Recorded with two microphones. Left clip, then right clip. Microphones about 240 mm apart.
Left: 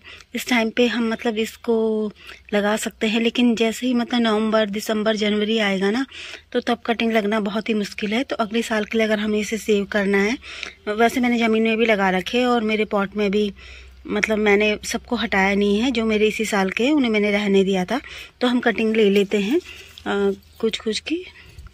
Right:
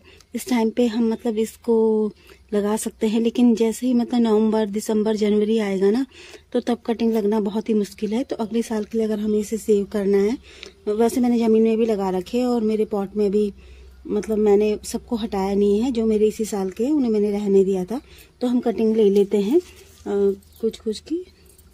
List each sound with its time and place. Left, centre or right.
0.3 s speech: centre
16.4 s speech: centre
17.0 s speech: centre
20.0 s speech: left
20.9 s speech: centre